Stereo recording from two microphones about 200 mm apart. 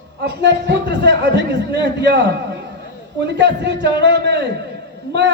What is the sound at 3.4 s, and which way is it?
A man's voice, 60° right (ahead or behind).